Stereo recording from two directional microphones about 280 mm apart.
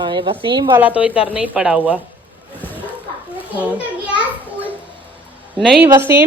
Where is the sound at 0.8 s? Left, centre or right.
Centre.